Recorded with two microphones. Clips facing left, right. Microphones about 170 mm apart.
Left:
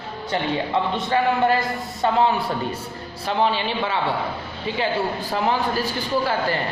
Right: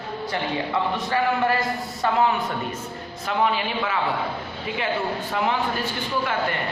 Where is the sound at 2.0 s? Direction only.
30° left (ahead or behind).